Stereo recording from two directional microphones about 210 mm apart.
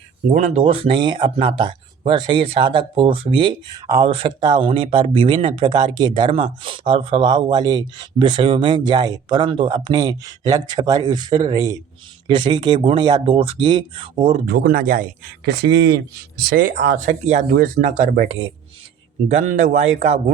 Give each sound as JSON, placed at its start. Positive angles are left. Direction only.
{"t": 0.3, "sound": "speech", "side_deg": -35}
{"t": 14.4, "sound": "speech", "side_deg": -45}